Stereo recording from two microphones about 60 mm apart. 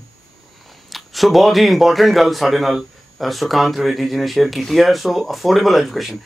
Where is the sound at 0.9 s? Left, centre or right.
Centre.